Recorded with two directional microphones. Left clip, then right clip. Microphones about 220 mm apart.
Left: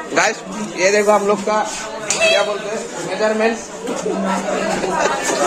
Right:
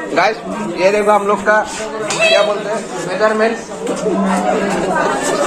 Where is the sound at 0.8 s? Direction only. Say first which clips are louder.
Right 2 dB; 20° left (ahead or behind).